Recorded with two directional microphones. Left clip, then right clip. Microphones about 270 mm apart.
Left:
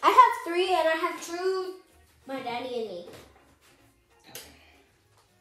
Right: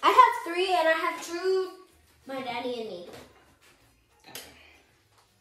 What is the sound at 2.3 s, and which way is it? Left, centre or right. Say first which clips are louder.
Speech: right 1 dB; centre.